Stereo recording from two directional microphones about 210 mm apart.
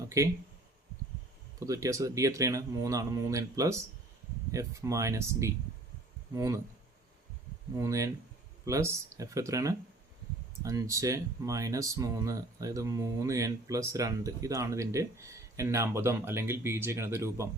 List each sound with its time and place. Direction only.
0.2 s speech: 15° right (ahead or behind)
1.5 s speech: 15° right (ahead or behind)
7.8 s speech: 15° right (ahead or behind)